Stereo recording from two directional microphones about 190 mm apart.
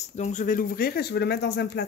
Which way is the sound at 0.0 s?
40° left (ahead or behind).